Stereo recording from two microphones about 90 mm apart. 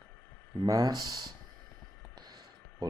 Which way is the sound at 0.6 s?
50° right (ahead or behind).